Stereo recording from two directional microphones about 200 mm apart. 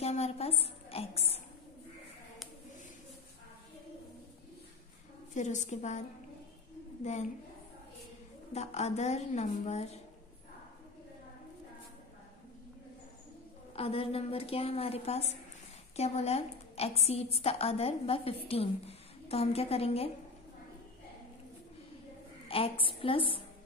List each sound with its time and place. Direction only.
0.0 s a woman's voice: 30° left (ahead or behind)
5.3 s a woman's voice: 35° left (ahead or behind)
8.5 s a woman's voice: 35° left (ahead or behind)
13.7 s a woman's voice: 30° left (ahead or behind)
22.5 s a woman's voice: 25° left (ahead or behind)